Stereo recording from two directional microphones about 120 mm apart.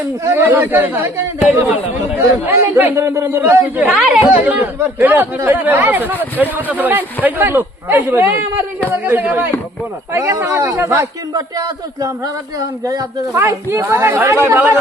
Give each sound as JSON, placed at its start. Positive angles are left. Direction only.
{"t": 0.3, "sound": "speech", "side_deg": -15}